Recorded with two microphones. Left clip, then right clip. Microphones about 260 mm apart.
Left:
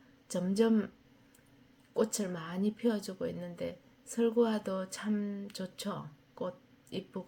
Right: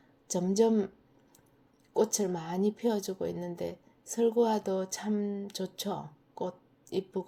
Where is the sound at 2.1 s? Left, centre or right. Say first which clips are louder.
Right 6 dB; centre.